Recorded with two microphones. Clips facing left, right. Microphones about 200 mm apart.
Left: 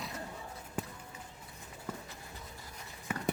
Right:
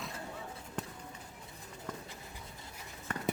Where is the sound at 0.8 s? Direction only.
10° left (ahead or behind).